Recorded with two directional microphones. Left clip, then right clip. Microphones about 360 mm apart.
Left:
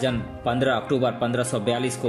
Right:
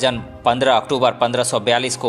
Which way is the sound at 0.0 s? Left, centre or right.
Centre.